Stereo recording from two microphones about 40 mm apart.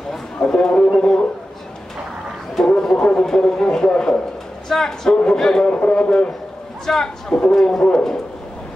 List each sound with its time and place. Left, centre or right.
0.1 s a sound: centre
2.5 s a man's voice: centre
4.6 s a man's voice: centre
5.7 s speech: left
6.9 s a man's voice: centre
7.2 s speech: left
7.5 s a man's voice: centre